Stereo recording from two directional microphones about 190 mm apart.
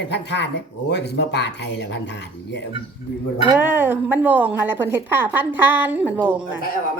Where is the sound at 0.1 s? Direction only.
65° left (ahead or behind).